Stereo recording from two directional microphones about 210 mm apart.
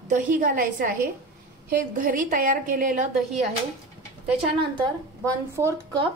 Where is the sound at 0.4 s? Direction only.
40° right (ahead or behind).